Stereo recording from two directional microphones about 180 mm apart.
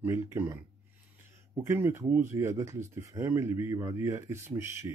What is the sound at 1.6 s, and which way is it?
Speech, 15° right (ahead or behind).